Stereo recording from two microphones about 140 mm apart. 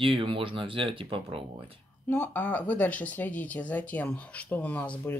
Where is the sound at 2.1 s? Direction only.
10° left (ahead or behind).